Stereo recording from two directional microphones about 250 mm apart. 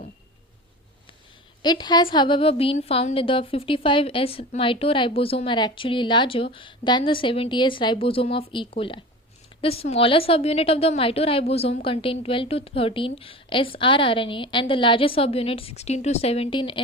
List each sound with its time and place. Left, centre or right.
1.6 s a woman's voice: centre